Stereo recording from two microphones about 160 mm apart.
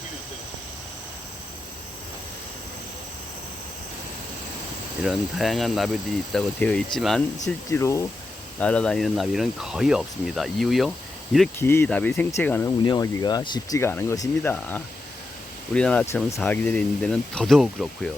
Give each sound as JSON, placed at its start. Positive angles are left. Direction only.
{"t": 5.0, "sound": "speech", "side_deg": 0}
{"t": 7.7, "sound": "speech", "side_deg": 20}
{"t": 8.6, "sound": "speech", "side_deg": 5}
{"t": 11.6, "sound": "speech", "side_deg": 15}
{"t": 12.8, "sound": "speech", "side_deg": 25}
{"t": 13.7, "sound": "speech", "side_deg": 15}